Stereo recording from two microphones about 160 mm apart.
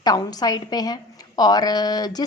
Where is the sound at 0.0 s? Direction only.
25° left (ahead or behind).